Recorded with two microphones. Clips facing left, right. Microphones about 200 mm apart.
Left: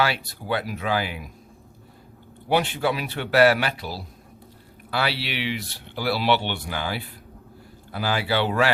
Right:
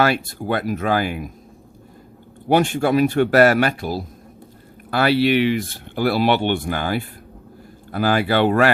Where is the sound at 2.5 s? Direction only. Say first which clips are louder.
Right 6 dB; 50° right (ahead or behind).